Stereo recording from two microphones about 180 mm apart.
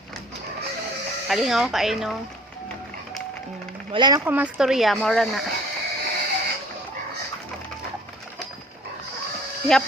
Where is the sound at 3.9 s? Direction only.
25° right (ahead or behind).